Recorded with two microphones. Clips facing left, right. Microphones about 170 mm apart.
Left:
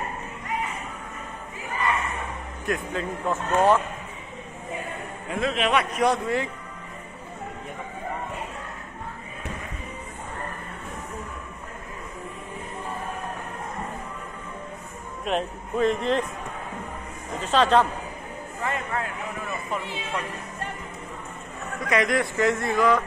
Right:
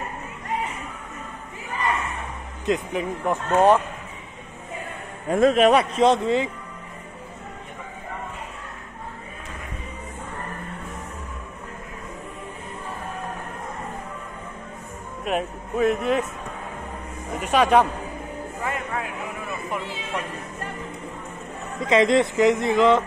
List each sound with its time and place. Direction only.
2.6 s speech: 20° right (ahead or behind)
5.3 s a man's voice: 45° right (ahead or behind)
5.9 s speech: 25° right (ahead or behind)
15.2 s speech: 5° right (ahead or behind)
17.4 s speech: 10° right (ahead or behind)
18.6 s music: 10° right (ahead or behind)
21.7 s speech: 25° right (ahead or behind)